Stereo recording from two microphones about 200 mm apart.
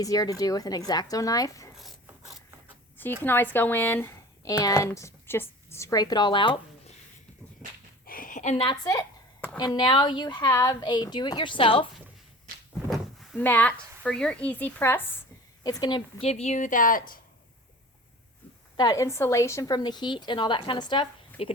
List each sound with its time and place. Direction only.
0.0 s speech: 15° left (ahead or behind)
1.7 s mechanisms: centre (ahead or behind)
3.2 s a woman's voice: 10° left (ahead or behind)
8.0 s a sound: 45° left (ahead or behind)
8.6 s a woman's voice: 20° left (ahead or behind)
12.9 s speech: 10° left (ahead or behind)
15.6 s speech: 20° left (ahead or behind); by 17.2 s 45° left (ahead or behind)
18.8 s a woman's voice: 15° left (ahead or behind)